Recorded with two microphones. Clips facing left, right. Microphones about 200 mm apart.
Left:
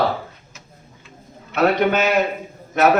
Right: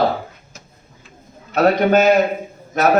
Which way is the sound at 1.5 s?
40° right (ahead or behind).